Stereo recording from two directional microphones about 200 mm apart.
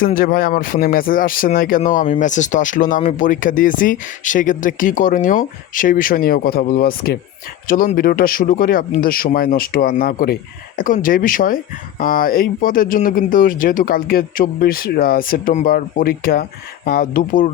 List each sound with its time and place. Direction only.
0.0 s speech: 45° left (ahead or behind)